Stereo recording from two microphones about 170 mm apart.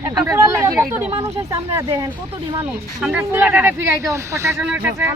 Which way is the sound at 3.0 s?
5° right (ahead or behind).